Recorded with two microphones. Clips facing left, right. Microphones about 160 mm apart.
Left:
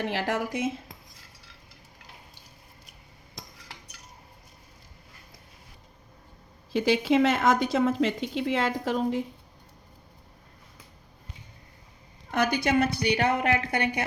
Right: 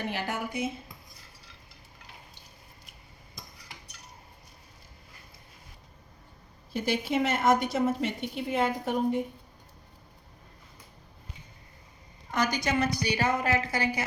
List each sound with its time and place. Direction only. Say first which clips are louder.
0.0 s speech: left 4 dB; 90° left
6.7 s a woman's voice: left 6 dB; 90° left
12.3 s a woman's voice: left 4 dB; 60° left (ahead or behind)